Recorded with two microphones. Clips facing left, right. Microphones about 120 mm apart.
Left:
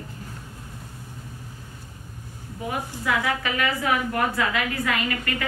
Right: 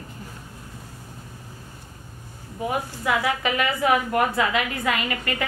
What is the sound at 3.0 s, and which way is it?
A woman's voice, 20° right (ahead or behind).